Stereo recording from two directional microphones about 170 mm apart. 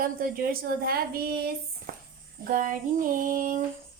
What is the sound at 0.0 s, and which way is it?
A woman's voice, 60° right (ahead or behind).